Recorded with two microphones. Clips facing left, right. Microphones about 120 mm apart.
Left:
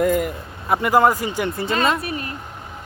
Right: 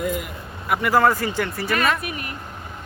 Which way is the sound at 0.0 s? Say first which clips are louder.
Left 7 dB; 45° left (ahead or behind).